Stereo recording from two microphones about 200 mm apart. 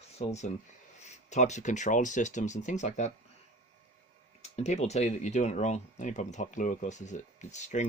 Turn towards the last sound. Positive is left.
turn(degrees=35)  # may be behind; listen again after turning